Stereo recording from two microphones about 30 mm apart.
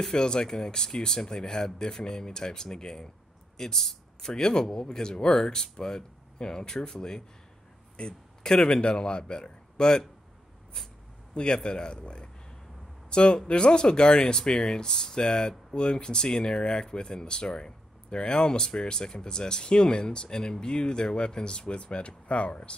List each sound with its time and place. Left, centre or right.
0.0 s speech: left
8.8 s speech: left
11.3 s speech: left